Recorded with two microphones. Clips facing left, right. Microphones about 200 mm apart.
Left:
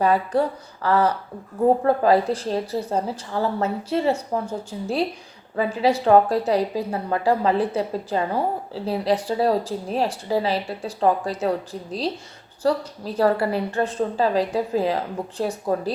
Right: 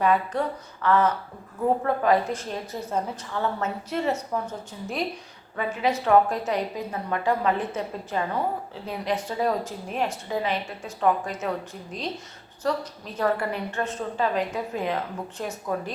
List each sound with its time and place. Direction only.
0.0 s a woman's voice: 35° left (ahead or behind)